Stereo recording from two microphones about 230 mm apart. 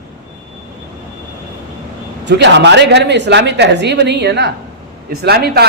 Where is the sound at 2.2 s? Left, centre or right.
Right.